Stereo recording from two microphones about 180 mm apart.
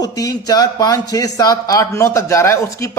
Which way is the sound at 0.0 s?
20° left (ahead or behind).